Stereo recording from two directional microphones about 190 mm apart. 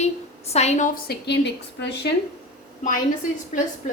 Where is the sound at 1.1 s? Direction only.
65° left (ahead or behind).